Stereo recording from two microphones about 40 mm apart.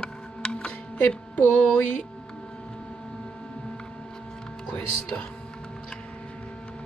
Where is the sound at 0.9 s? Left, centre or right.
Left.